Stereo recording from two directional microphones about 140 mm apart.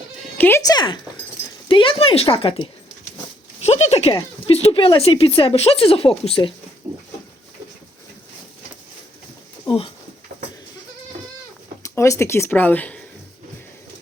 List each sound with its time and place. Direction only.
0.3 s speech: 15° left (ahead or behind)
0.6 s speech: 30° left (ahead or behind)
3.6 s speech: 50° left (ahead or behind)
9.6 s a sound: 40° left (ahead or behind)
11.8 s speech: 20° left (ahead or behind)